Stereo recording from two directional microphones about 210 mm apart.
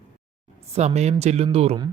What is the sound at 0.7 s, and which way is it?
Speech, 30° right (ahead or behind).